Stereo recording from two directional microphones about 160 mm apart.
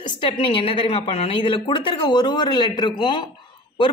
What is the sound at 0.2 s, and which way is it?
Speech, 35° left (ahead or behind).